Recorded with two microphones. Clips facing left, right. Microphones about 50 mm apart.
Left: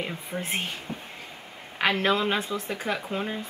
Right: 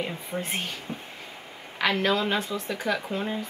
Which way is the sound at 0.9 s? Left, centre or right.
Centre.